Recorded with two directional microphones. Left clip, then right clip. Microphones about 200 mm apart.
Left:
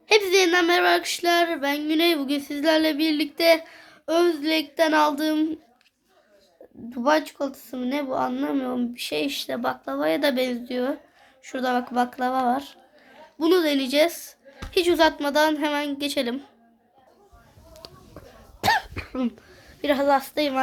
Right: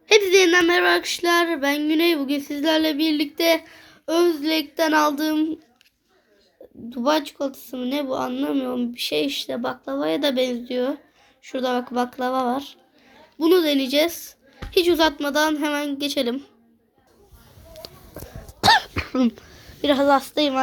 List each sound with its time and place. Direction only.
0.1 s speech: 5° left (ahead or behind); by 1.9 s 10° right (ahead or behind)
1.9 s speech: 10° left (ahead or behind)
6.9 s speech: centre (ahead or behind)
17.7 s a sound: centre (ahead or behind)
18.6 s cough: 30° right (ahead or behind)
19.8 s a woman's voice: 10° right (ahead or behind)